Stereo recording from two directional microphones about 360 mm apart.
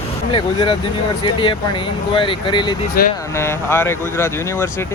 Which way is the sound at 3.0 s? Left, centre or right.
Left.